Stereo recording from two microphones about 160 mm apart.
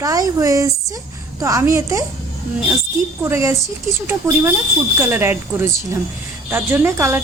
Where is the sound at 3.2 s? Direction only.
20° right (ahead or behind).